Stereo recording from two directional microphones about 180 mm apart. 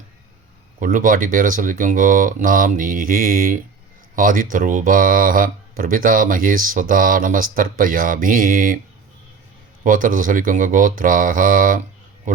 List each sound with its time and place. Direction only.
0.8 s speech: 50° right (ahead or behind)
9.8 s speech: 50° right (ahead or behind)